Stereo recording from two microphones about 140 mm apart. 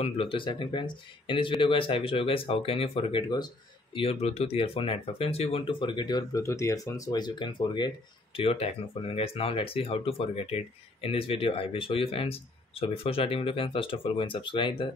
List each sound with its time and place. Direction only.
0.0 s speech: 40° left (ahead or behind)
8.4 s speech: 45° left (ahead or behind)